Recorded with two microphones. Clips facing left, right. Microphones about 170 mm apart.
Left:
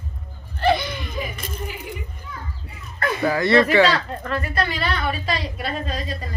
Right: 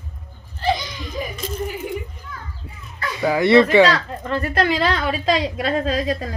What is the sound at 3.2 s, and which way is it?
Speech, 20° right (ahead or behind).